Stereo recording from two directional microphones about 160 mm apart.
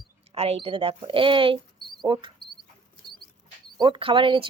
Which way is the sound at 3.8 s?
30° right (ahead or behind).